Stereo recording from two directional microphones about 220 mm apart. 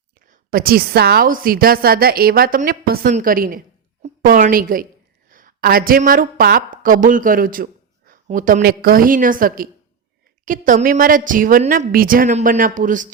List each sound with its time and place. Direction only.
0.3 s a woman's voice: 40° right (ahead or behind)